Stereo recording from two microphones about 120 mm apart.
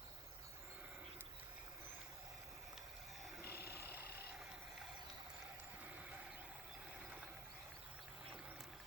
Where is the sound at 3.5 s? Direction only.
20° right (ahead or behind).